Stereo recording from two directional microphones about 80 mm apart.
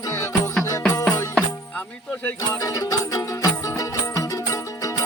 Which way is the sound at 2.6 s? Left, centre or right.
Left.